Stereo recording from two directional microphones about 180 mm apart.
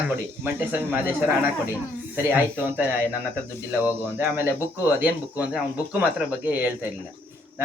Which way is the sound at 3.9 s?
10° right (ahead or behind).